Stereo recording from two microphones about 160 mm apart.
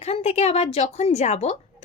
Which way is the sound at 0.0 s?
45° left (ahead or behind).